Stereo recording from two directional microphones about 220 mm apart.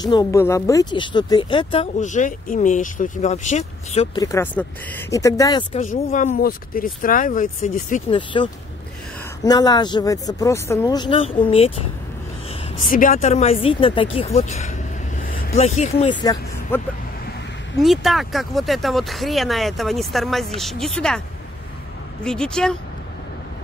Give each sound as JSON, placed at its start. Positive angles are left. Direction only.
{"t": 0.0, "sound": "speech", "side_deg": 20}
{"t": 4.2, "sound": "speech", "side_deg": 10}
{"t": 5.9, "sound": "speech", "side_deg": 35}
{"t": 8.2, "sound": "speech", "side_deg": 20}
{"t": 12.8, "sound": "speech", "side_deg": 35}
{"t": 16.2, "sound": "speech", "side_deg": 15}
{"t": 17.8, "sound": "speech", "side_deg": 0}
{"t": 22.2, "sound": "speech", "side_deg": 5}